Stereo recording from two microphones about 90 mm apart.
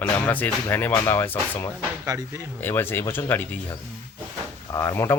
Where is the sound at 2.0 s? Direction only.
35° right (ahead or behind).